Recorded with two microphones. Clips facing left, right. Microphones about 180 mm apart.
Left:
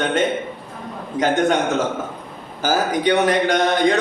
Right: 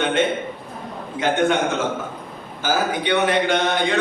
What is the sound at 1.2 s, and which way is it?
A man's voice, 40° left (ahead or behind).